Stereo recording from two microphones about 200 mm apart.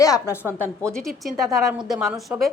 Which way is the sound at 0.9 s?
Centre (ahead or behind).